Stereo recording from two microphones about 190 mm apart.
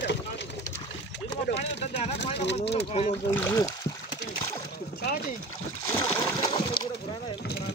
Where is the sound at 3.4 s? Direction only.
15° left (ahead or behind).